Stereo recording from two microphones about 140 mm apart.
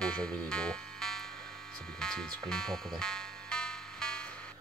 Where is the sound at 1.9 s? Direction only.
5° left (ahead or behind).